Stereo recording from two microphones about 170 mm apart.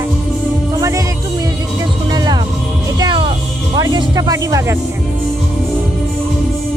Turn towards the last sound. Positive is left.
turn(degrees=-15)  # may be behind; listen again after turning